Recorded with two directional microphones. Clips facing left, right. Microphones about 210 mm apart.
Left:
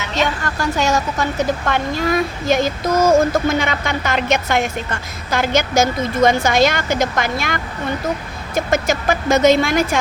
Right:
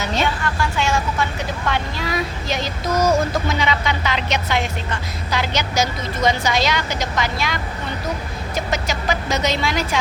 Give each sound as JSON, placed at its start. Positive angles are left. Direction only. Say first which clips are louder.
{"t": 0.4, "sound": "a woman's voice", "louder": "left 3 dB", "side_deg": 40}